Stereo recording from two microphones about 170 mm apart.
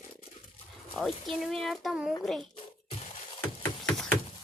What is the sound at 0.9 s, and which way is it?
Speech, centre (ahead or behind).